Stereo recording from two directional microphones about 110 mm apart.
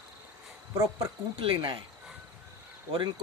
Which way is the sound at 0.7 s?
30° right (ahead or behind).